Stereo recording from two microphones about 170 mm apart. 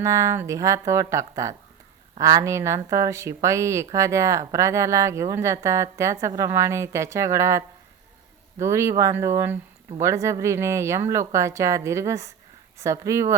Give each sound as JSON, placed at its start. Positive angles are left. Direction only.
{"t": 0.0, "sound": "speech", "side_deg": -15}